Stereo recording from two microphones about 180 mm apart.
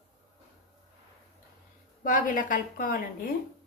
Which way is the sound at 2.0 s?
45° left (ahead or behind).